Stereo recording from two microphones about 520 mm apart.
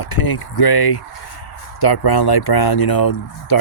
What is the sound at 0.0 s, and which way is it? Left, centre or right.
Speech, left.